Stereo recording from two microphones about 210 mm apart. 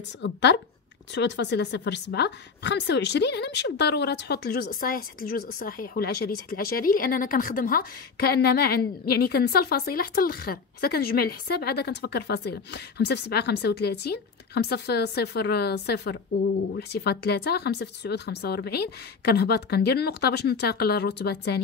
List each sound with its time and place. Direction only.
0.2 s a woman's voice: 55° left (ahead or behind)